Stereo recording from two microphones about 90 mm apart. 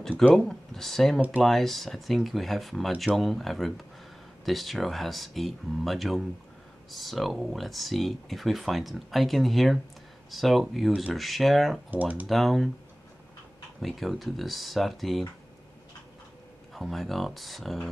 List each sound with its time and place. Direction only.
0.3 s speech: 5° left (ahead or behind)
11.9 s speech: 20° right (ahead or behind)
12.3 s speech: centre (ahead or behind)
13.7 s speech: centre (ahead or behind)
16.7 s speech: centre (ahead or behind)